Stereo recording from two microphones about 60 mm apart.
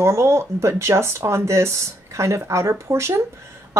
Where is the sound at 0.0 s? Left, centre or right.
Right.